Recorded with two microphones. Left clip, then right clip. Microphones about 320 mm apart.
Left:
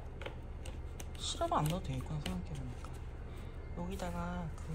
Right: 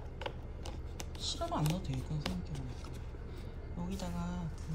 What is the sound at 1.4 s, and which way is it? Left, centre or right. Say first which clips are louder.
Speech: left 5 dB; centre.